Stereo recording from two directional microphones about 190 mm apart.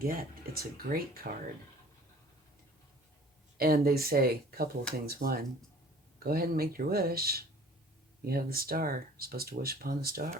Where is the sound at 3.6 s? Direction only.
50° right (ahead or behind).